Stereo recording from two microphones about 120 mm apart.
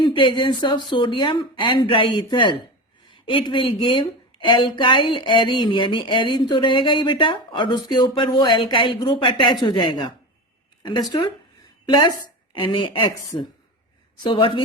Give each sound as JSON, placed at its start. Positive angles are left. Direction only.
{"t": 0.0, "sound": "a woman's voice", "side_deg": 45}